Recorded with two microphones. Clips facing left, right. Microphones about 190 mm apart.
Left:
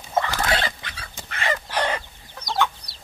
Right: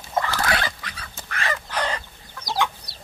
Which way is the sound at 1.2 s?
25° left (ahead or behind).